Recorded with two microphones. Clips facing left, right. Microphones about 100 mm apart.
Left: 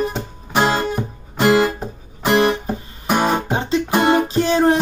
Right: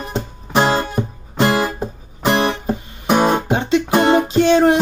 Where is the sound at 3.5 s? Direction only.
35° left (ahead or behind).